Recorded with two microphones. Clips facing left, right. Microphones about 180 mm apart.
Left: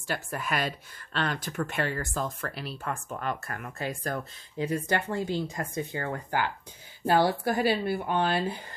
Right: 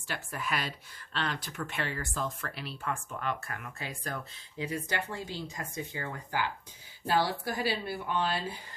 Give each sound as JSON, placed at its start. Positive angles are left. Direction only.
{"t": 0.1, "sound": "speech", "side_deg": 45}